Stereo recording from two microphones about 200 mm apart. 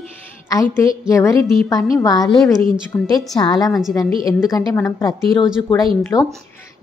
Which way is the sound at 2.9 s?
15° left (ahead or behind).